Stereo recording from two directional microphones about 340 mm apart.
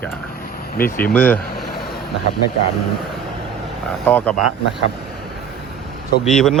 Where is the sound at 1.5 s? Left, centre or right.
Left.